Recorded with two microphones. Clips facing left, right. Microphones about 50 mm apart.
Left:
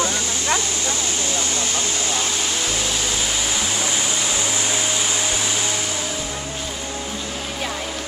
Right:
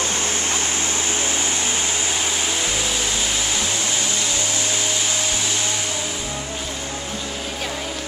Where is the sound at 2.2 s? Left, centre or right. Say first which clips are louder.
Right 1 dB; centre.